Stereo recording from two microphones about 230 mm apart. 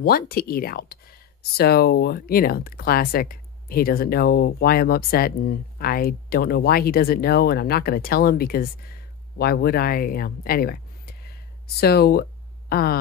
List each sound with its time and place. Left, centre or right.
0.0 s speech: left